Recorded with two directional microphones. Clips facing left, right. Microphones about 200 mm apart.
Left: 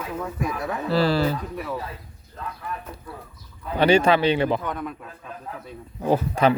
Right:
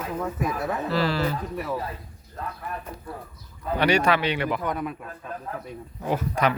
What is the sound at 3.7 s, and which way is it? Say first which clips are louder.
Speech: left 4 dB; 25° left (ahead or behind).